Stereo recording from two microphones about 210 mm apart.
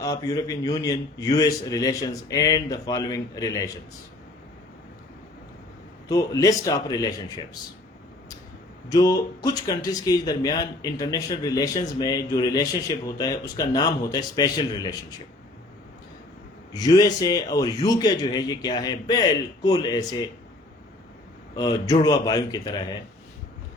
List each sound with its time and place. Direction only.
0.0 s speech: 15° left (ahead or behind)
6.1 s speech: 15° left (ahead or behind)
8.9 s speech: 20° left (ahead or behind)
16.7 s a man's voice: 20° left (ahead or behind)
21.5 s a man's voice: 20° left (ahead or behind)